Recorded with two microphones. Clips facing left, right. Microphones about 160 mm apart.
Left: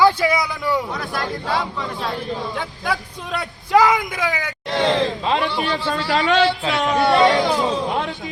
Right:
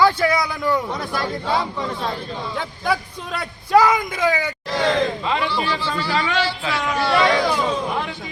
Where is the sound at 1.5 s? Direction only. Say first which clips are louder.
Right 1 dB; 20° right (ahead or behind).